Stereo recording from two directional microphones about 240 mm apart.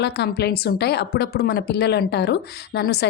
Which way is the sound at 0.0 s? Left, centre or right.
Left.